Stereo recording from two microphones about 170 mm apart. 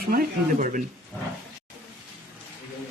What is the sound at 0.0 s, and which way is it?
Speech, 60° right (ahead or behind).